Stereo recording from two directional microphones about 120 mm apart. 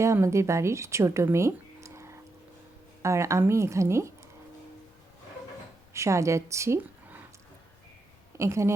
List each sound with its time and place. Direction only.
0.0 s a woman's voice: 25° right (ahead or behind)
5.9 s speech: 25° right (ahead or behind)
8.4 s a woman's voice: 25° right (ahead or behind)